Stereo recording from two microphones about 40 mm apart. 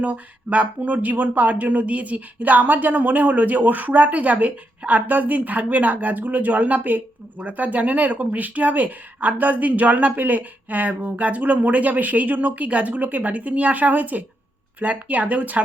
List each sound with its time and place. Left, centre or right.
0.0 s a woman's voice: right